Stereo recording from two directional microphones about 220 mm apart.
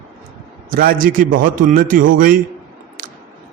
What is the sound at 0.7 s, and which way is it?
A man's voice, 40° right (ahead or behind).